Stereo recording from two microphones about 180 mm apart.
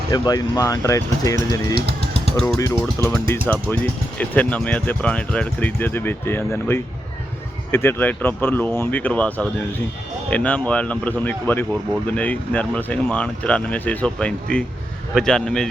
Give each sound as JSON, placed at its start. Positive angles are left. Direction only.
{"t": 0.1, "sound": "speech", "side_deg": 20}
{"t": 1.7, "sound": "a sound", "side_deg": -65}
{"t": 2.3, "sound": "speech", "side_deg": 0}